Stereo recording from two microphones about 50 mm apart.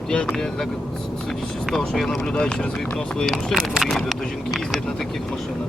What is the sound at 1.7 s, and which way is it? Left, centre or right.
Speech, centre.